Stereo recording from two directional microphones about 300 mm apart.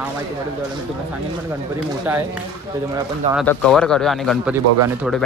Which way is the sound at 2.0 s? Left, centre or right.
Centre.